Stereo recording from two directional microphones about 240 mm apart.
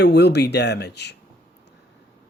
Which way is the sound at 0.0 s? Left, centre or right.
Left.